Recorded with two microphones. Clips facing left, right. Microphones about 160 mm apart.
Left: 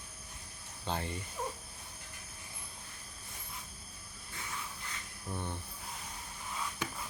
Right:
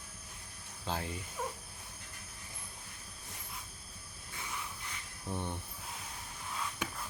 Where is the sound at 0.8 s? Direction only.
Centre (ahead or behind).